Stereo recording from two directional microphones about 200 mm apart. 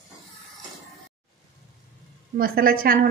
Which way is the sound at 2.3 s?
45° right (ahead or behind).